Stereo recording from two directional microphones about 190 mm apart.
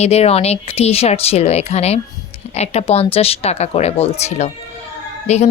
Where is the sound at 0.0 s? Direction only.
35° left (ahead or behind).